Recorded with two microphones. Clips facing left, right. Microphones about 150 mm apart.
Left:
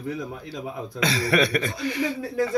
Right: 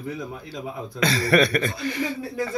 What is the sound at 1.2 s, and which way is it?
Speech, 45° right (ahead or behind).